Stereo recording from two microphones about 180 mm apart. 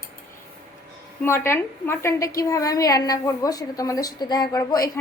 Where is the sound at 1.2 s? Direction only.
15° left (ahead or behind).